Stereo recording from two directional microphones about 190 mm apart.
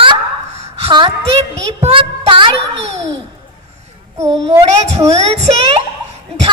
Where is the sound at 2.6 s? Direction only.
70° right (ahead or behind).